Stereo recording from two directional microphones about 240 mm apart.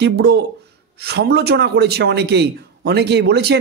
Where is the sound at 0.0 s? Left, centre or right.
Right.